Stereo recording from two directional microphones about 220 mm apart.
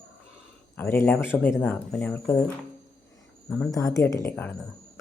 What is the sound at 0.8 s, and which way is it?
Speech, 10° left (ahead or behind).